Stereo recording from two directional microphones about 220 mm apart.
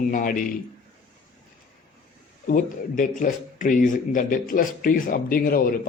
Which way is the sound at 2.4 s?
35° left (ahead or behind).